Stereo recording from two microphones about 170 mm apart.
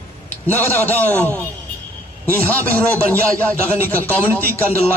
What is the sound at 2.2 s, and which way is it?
A man's voice, 15° right (ahead or behind).